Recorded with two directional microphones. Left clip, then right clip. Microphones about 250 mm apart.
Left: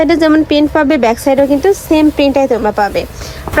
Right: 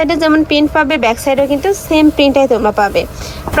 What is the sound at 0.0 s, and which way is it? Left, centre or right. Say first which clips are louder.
A woman's voice: left 2 dB; centre.